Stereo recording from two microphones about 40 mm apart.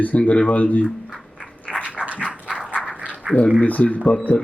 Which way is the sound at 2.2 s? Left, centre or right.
Right.